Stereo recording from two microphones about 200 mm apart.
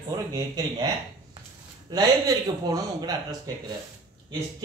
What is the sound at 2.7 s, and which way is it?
Speech, 20° right (ahead or behind).